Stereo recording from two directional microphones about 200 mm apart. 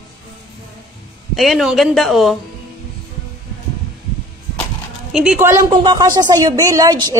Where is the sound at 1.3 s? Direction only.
Centre (ahead or behind).